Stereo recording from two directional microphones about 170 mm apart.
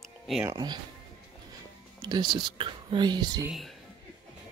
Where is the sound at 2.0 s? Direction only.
25° right (ahead or behind).